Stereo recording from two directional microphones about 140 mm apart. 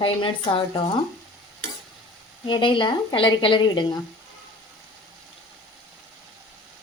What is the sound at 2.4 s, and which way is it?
Speech, 35° left (ahead or behind).